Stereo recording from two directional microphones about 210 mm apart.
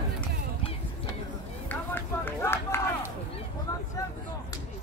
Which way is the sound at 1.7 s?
10° left (ahead or behind).